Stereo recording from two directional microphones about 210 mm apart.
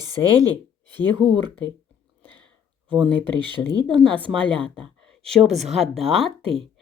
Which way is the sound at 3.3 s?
20° right (ahead or behind).